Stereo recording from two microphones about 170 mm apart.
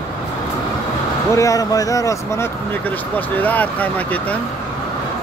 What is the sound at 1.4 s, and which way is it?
Speech, 20° left (ahead or behind).